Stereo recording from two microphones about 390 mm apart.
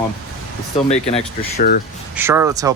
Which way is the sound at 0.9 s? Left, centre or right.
Centre.